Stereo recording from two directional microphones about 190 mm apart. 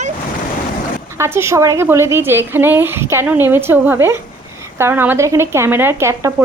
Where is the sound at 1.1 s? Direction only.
15° right (ahead or behind).